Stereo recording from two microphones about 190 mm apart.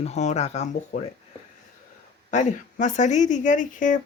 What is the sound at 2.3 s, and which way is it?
A woman's voice, 40° left (ahead or behind).